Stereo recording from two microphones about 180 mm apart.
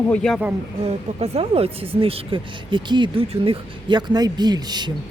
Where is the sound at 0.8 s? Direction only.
35° right (ahead or behind).